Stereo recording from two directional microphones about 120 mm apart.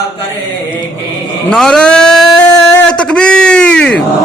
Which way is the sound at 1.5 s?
5° left (ahead or behind).